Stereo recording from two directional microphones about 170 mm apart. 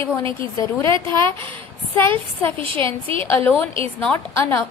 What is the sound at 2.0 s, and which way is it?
Speech, 10° left (ahead or behind).